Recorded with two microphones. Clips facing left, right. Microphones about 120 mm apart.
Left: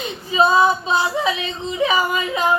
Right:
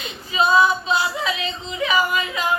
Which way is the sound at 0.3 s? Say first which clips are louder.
Left 2 dB; 30° left (ahead or behind).